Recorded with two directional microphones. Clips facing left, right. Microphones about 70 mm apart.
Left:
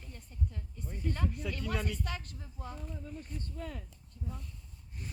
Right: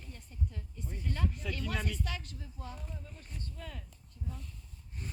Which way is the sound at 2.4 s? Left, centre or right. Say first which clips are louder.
Left 1 dB; left.